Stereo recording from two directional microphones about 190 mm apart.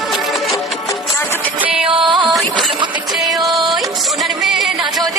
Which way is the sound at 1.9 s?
25° right (ahead or behind).